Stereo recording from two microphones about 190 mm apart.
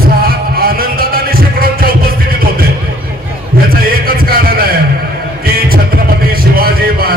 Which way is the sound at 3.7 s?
50° right (ahead or behind).